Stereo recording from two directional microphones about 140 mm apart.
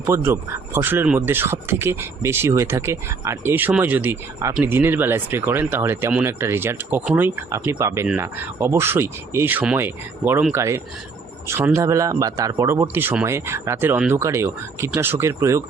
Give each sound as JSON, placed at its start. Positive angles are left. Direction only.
{"t": 0.0, "sound": "speech", "side_deg": -20}